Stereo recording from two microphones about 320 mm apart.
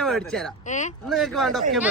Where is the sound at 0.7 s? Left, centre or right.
Left.